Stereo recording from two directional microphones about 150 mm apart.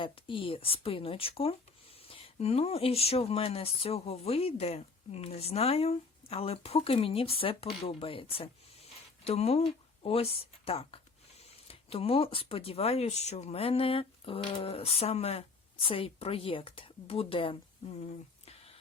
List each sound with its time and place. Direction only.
0.0 s speech: 35° left (ahead or behind)